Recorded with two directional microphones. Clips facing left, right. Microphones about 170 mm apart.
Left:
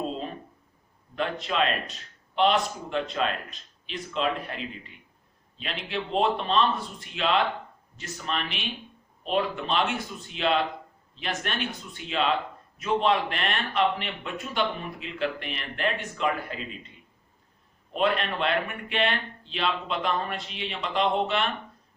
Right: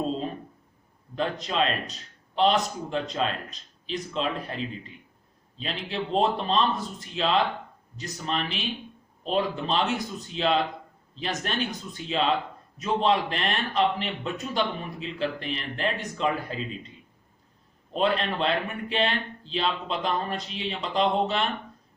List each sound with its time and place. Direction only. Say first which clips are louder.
1.1 s a man's voice: right 1 dB; 35° right (ahead or behind)
17.9 s a man's voice: right 1 dB; 35° right (ahead or behind)